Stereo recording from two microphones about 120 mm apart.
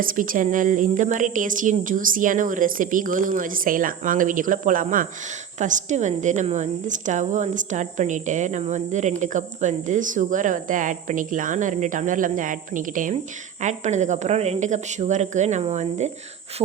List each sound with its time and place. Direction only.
0.2 s a woman's voice: 90° right; by 16.1 s 70° right (ahead or behind)
16.6 s speech: 45° right (ahead or behind)